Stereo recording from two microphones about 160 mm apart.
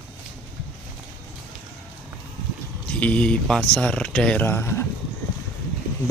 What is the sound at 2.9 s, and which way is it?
Speech, 10° left (ahead or behind).